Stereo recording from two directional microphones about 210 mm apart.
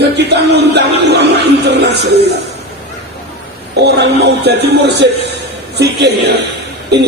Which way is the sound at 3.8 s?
50° right (ahead or behind).